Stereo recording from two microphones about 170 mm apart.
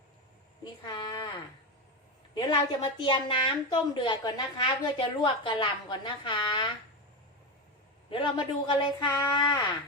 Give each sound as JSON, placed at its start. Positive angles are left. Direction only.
{"t": 0.6, "sound": "a sound", "side_deg": 25}
{"t": 2.3, "sound": "a woman's voice", "side_deg": 25}
{"t": 8.1, "sound": "a woman's voice", "side_deg": 30}